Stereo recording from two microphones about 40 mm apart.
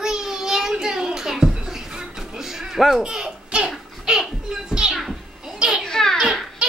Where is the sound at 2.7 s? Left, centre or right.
Centre.